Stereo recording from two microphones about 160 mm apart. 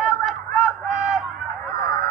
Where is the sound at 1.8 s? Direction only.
20° left (ahead or behind).